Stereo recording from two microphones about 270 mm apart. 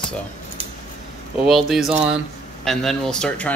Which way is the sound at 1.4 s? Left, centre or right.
Centre.